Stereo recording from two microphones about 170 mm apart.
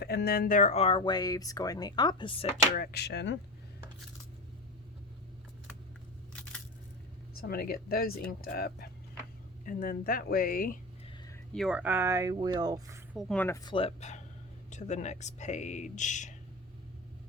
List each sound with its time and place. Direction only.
0.0 s speech: 70° left (ahead or behind); by 2.6 s 35° left (ahead or behind)
2.7 s speech: 65° left (ahead or behind); by 3.3 s 85° left
7.3 s speech: 60° left (ahead or behind)
11.5 s speech: 5° right (ahead or behind); by 13.0 s 20° right (ahead or behind)
13.1 s speech: 5° left (ahead or behind)
13.7 s speech: 35° left (ahead or behind)